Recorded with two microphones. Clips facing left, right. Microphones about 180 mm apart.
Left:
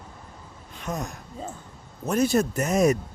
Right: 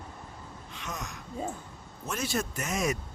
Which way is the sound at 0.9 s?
60° left (ahead or behind).